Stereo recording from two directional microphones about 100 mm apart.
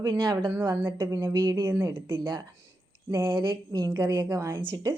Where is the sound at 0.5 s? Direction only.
20° right (ahead or behind).